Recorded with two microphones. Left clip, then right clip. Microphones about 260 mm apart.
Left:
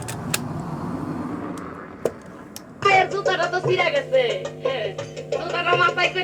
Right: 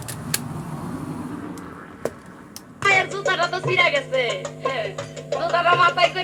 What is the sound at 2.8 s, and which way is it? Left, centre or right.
Music, right.